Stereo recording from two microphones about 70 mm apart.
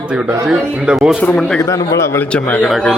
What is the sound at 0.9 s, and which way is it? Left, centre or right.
Speech, centre.